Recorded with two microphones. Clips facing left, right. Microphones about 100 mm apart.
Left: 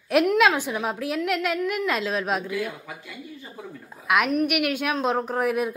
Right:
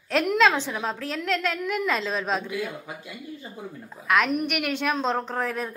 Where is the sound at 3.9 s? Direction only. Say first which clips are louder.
Left 1 dB; 5° left (ahead or behind).